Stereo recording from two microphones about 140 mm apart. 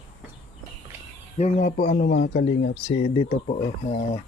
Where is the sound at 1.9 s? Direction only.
85° left.